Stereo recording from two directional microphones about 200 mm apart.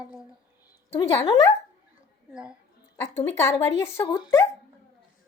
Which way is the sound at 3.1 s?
10° left (ahead or behind).